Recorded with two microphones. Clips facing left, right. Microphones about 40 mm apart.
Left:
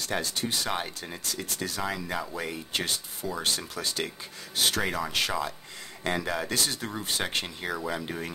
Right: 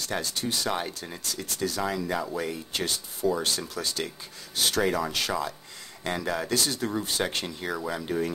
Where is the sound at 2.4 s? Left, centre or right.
Left.